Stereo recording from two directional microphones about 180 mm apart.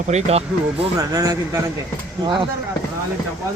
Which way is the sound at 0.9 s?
20° right (ahead or behind).